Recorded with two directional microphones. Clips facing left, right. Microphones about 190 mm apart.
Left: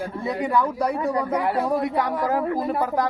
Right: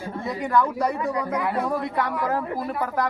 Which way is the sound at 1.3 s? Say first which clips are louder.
Left 2 dB; 35° left (ahead or behind).